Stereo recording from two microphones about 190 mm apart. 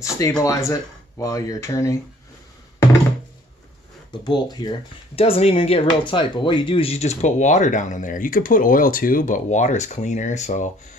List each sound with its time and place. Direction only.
0.4 s speech: 15° left (ahead or behind)
4.1 s speech: 25° left (ahead or behind); by 10.7 s 40° left (ahead or behind)